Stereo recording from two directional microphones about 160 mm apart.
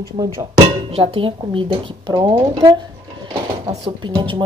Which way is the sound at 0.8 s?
35° right (ahead or behind).